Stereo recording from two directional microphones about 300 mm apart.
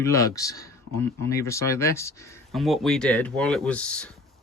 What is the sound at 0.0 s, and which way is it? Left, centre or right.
Speech, centre.